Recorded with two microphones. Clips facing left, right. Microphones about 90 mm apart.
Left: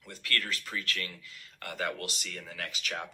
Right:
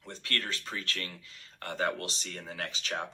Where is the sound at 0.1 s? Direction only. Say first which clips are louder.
Left 1 dB; 35° right (ahead or behind).